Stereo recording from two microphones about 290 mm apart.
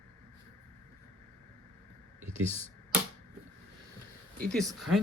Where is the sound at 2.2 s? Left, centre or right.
Right.